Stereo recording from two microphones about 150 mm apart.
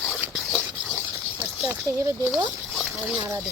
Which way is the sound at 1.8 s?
20° right (ahead or behind).